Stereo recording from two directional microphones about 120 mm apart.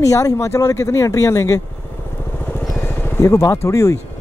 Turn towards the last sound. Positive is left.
turn(degrees=25)  # may be behind; listen again after turning